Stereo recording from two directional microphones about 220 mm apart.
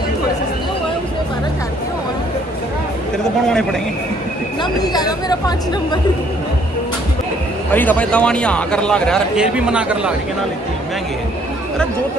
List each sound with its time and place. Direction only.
4.8 s speech: 20° left (ahead or behind)
7.7 s a man's voice: 10° left (ahead or behind)